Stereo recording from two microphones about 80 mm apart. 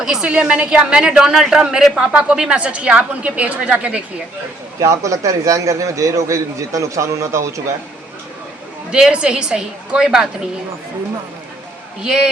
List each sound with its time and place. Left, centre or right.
0.0 s a woman's voice: centre
4.8 s a man's voice: right
8.9 s a woman's voice: centre
12.0 s a woman's voice: centre